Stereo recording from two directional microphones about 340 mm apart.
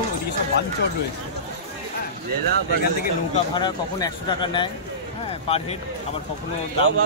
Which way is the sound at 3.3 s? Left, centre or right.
Centre.